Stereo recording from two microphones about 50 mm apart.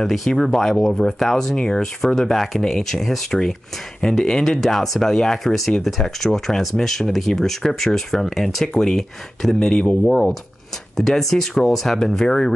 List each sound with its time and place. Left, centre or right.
0.0 s speech: centre